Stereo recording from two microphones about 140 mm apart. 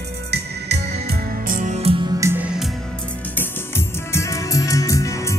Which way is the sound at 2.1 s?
20° right (ahead or behind).